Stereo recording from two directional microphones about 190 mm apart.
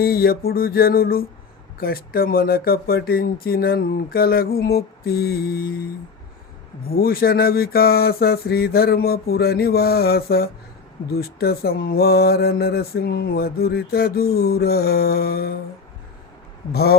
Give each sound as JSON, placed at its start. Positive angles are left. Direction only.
{"t": 0.0, "sound": "mantra", "side_deg": 55}
{"t": 6.8, "sound": "mantra", "side_deg": 50}
{"t": 16.7, "sound": "speech", "side_deg": 55}